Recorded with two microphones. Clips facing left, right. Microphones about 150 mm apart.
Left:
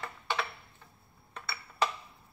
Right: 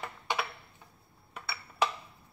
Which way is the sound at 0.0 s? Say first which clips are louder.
Right 1 dB; 15° right (ahead or behind).